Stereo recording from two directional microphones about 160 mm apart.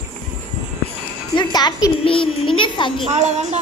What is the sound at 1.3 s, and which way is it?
Music, 25° left (ahead or behind).